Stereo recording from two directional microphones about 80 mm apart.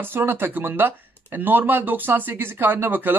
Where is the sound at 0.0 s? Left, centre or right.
Right.